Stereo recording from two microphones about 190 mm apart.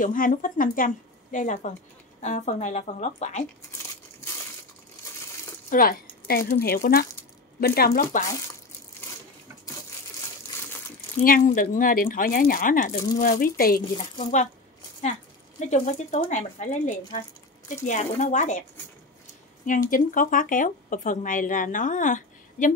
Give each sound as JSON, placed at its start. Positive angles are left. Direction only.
{"t": 0.0, "sound": "speech", "side_deg": 45}
{"t": 5.7, "sound": "speech", "side_deg": 50}
{"t": 11.2, "sound": "speech", "side_deg": 45}
{"t": 14.2, "sound": "speech", "side_deg": 40}
{"t": 15.6, "sound": "speech", "side_deg": 40}
{"t": 19.9, "sound": "speech", "side_deg": 45}